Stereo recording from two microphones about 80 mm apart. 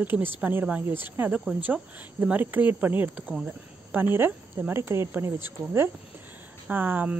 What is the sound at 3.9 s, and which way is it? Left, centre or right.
Speech, right.